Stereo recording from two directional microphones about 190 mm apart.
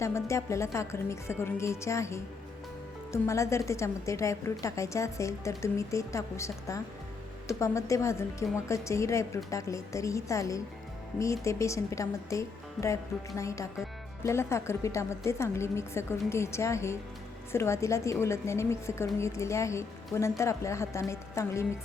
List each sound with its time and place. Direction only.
0.0 s a woman's voice: 15° left (ahead or behind)